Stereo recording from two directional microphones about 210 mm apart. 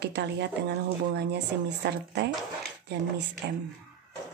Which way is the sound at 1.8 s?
50° right (ahead or behind).